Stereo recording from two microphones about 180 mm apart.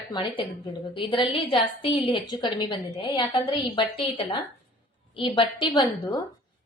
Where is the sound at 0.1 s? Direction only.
25° left (ahead or behind).